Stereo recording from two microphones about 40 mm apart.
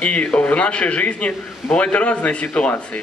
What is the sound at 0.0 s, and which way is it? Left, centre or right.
A man's voice, left.